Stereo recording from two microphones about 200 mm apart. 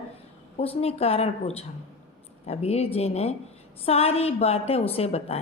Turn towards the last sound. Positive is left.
turn(degrees=30)  # may be behind; listen again after turning